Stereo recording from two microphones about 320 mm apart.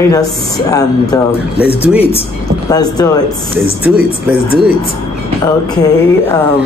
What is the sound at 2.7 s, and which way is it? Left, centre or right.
Speech, centre.